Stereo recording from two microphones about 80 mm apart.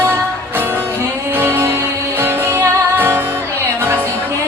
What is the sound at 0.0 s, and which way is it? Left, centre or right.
Music, right.